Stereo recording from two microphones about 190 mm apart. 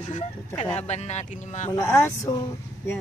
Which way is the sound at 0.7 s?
35° left (ahead or behind).